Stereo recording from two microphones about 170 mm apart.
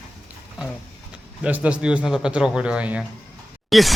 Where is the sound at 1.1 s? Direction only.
5° right (ahead or behind).